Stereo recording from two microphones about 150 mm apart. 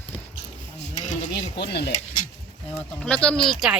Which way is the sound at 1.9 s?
55° left (ahead or behind).